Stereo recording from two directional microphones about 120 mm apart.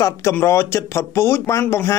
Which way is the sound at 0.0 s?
25° left (ahead or behind).